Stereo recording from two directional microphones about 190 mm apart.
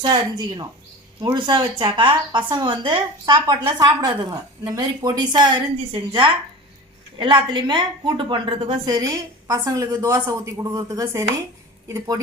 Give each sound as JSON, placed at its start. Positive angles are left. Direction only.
{"t": 0.0, "sound": "a woman's voice", "side_deg": -25}